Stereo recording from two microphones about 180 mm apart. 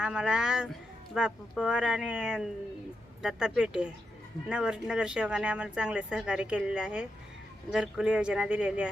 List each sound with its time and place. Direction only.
0.0 s speech: 5° right (ahead or behind)